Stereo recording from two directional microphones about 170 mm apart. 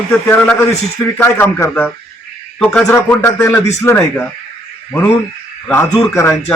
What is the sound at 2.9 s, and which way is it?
A man's voice, 15° left (ahead or behind).